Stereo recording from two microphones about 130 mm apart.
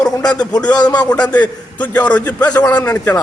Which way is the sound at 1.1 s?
10° left (ahead or behind).